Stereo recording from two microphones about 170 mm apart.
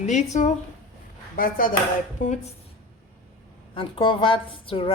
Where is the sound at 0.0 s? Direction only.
45° left (ahead or behind).